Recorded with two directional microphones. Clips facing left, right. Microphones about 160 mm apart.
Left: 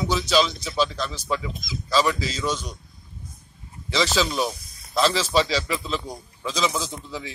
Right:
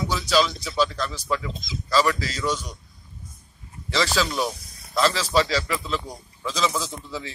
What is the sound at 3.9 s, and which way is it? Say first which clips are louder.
A man's voice: left 1 dB; 20° left (ahead or behind).